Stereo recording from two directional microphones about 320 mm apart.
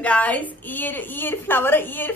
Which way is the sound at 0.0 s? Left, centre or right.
Centre.